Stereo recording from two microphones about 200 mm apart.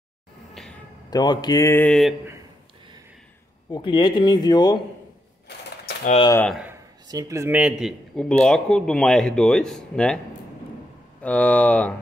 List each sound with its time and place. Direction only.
0.6 s a sound: centre (ahead or behind)
1.1 s speech: 20° left (ahead or behind); by 2.1 s 5° left (ahead or behind)
3.7 s speech: 25° left (ahead or behind)
6.3 s speech: 5° left (ahead or behind)
6.6 s a man's voice: 15° right (ahead or behind); by 11.9 s 5° left (ahead or behind)